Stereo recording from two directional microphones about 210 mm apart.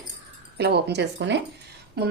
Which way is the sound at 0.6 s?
50° right (ahead or behind).